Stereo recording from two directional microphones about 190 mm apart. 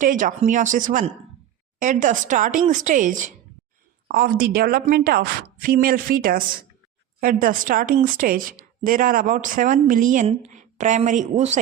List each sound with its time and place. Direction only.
0.0 s a woman's voice: 45° right (ahead or behind)